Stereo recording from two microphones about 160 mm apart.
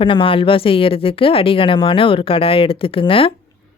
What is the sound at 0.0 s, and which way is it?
Speech, 30° left (ahead or behind).